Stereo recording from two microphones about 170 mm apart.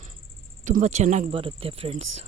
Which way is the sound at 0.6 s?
45° right (ahead or behind).